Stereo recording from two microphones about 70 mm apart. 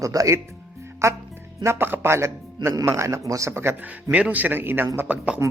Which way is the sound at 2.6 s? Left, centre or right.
Right.